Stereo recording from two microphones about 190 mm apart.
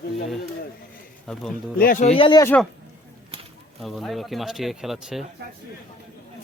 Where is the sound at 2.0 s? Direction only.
25° left (ahead or behind).